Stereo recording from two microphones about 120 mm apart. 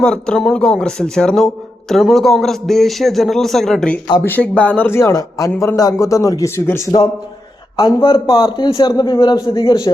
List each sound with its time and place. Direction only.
0.0 s a man's voice: 5° left (ahead or behind); by 7.0 s 25° left (ahead or behind)
7.9 s a man's voice: 45° left (ahead or behind)